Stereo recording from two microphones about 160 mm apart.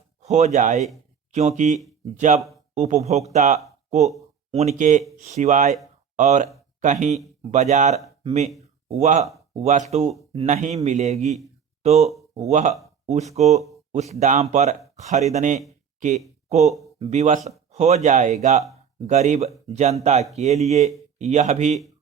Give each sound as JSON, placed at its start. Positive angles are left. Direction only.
{"t": 0.2, "sound": "speech", "side_deg": -45}